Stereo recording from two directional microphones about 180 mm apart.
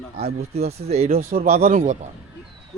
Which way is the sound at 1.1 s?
55° right (ahead or behind).